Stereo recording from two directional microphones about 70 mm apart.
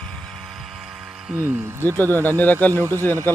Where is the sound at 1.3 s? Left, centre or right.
Right.